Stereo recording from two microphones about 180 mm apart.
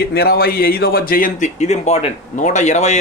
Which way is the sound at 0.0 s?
60° left (ahead or behind).